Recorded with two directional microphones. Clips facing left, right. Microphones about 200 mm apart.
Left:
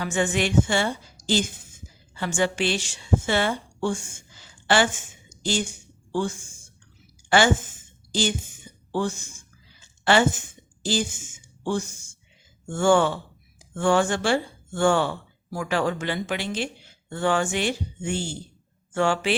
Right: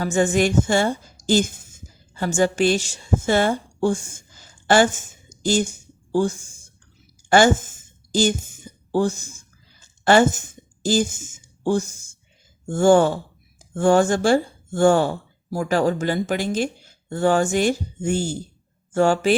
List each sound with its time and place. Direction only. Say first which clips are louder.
0.0 s a woman's voice: right 5 dB; 40° right (ahead or behind)
7.3 s a sound: right 4 dB; 45° right (ahead or behind)
9.8 s speech: right 4 dB; 45° right (ahead or behind)